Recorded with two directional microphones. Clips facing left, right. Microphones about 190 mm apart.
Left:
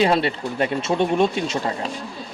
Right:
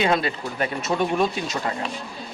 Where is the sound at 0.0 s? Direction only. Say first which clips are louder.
Left 3 dB; 30° left (ahead or behind).